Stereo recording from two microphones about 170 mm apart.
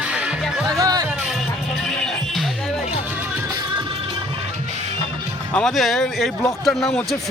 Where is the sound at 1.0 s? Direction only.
5° right (ahead or behind).